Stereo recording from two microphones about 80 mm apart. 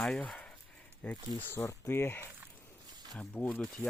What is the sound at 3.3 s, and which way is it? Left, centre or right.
Speech, centre.